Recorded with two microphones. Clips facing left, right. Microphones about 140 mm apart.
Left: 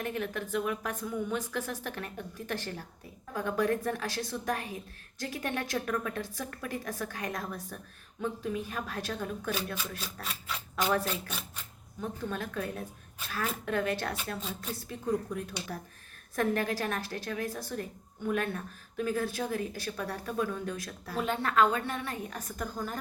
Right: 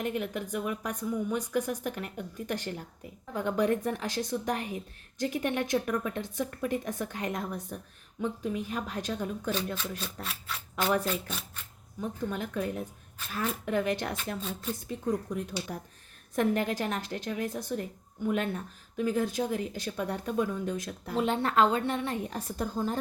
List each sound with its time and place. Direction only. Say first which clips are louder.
0.0 s a woman's voice: right 2 dB; 15° right (ahead or behind)
10.2 s speech: even; centre (ahead or behind)
11.0 s speech: right 3 dB; 10° left (ahead or behind)
11.9 s a woman's voice: right 2 dB; 15° right (ahead or behind)